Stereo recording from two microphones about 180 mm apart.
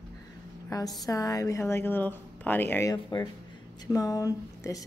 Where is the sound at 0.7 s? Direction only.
20° left (ahead or behind).